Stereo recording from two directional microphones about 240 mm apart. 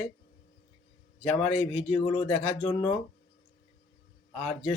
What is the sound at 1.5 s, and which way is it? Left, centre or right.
Speech, left.